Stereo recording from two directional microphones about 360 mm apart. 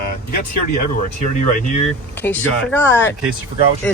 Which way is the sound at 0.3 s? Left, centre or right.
Left.